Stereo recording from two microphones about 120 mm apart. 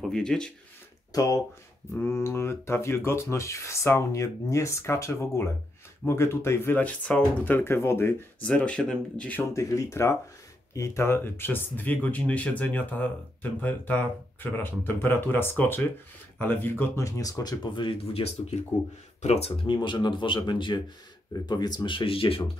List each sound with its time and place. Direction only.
0.1 s speech: 5° left (ahead or behind)
1.1 s speech: 30° left (ahead or behind)
8.5 s speech: 10° left (ahead or behind)
9.4 s speech: 25° left (ahead or behind); by 18.3 s 50° left (ahead or behind)
19.2 s speech: 60° left (ahead or behind)
19.6 s speech: 40° left (ahead or behind)